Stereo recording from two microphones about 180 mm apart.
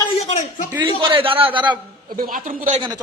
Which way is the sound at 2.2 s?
50° right (ahead or behind).